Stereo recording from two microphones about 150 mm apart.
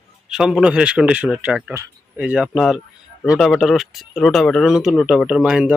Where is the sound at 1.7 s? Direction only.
20° right (ahead or behind).